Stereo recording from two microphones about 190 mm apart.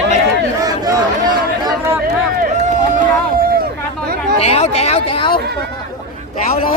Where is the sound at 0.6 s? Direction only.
20° right (ahead or behind).